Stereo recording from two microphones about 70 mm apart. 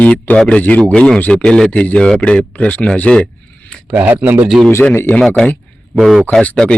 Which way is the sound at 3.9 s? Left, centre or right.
Right.